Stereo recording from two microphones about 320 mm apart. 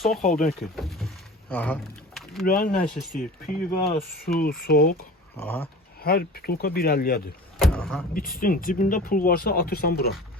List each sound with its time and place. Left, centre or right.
0.2 s speech: left
0.4 s vehicle: centre
2.5 s speech: left
2.9 s speech: centre
3.7 s speech: left
5.4 s speech: centre
6.0 s speech: left
7.6 s vehicle: centre
8.1 s speech: left